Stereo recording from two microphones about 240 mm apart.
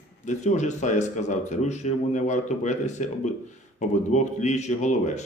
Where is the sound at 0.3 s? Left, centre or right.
Left.